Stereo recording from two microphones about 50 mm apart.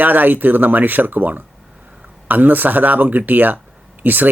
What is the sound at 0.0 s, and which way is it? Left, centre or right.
Speech, right.